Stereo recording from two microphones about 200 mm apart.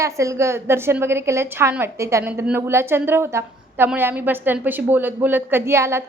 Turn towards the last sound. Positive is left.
turn(degrees=-15)  # may be behind; listen again after turning